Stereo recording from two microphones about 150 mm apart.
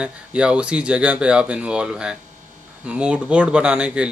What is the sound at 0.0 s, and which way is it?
Speech, 5° right (ahead or behind).